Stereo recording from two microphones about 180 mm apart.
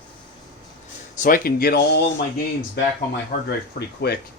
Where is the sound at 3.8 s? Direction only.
60° left (ahead or behind).